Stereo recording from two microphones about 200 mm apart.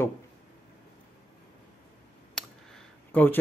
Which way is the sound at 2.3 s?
5° left (ahead or behind).